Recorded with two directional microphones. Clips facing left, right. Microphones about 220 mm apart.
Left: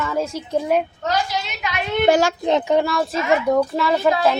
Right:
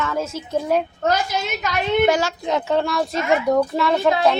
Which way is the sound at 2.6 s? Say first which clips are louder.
Even; 15° left (ahead or behind).